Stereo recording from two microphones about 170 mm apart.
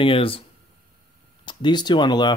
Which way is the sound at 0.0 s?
30° left (ahead or behind).